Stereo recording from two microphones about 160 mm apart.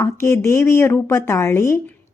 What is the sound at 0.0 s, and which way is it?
A woman's voice, 15° left (ahead or behind).